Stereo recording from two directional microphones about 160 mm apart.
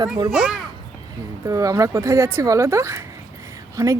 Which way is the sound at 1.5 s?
20° right (ahead or behind).